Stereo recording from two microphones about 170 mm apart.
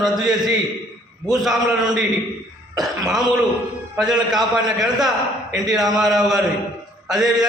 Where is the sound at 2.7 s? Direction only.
Centre (ahead or behind).